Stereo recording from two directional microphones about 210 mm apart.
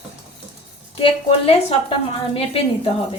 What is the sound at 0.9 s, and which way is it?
A woman's voice, 25° left (ahead or behind).